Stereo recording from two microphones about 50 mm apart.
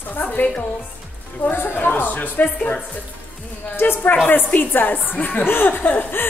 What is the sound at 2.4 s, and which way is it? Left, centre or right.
Speech, left.